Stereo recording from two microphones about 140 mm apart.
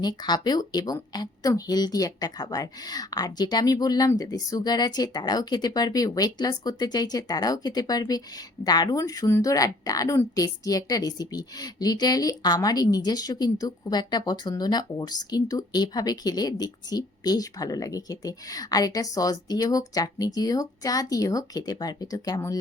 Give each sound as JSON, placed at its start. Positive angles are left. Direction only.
{"t": 0.0, "sound": "speech", "side_deg": 30}